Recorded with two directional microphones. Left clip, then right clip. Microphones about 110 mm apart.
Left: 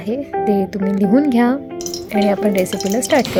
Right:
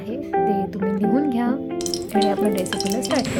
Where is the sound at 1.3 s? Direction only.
65° left (ahead or behind).